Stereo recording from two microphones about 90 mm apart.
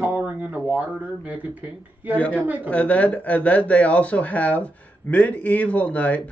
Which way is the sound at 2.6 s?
15° left (ahead or behind).